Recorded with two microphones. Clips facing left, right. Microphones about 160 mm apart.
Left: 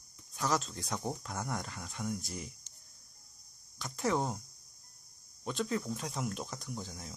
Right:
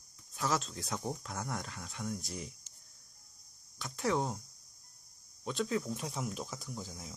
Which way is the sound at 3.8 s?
Centre (ahead or behind).